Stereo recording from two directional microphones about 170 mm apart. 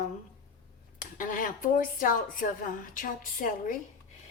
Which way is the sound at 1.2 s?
50° left (ahead or behind).